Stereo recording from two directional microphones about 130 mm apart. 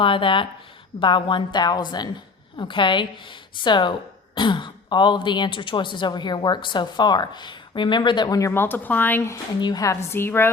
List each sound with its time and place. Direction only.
0.0 s a woman's voice: 40° left (ahead or behind); by 9.4 s 20° left (ahead or behind)
9.6 s a woman's voice: 30° left (ahead or behind)